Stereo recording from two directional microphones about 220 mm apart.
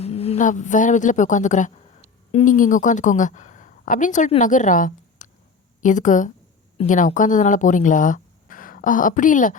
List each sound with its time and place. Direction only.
0.0 s a woman's voice: 30° left (ahead or behind)